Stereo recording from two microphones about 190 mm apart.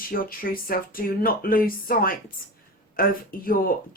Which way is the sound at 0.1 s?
50° left (ahead or behind).